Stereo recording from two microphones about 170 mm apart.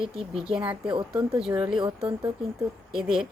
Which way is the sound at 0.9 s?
30° right (ahead or behind).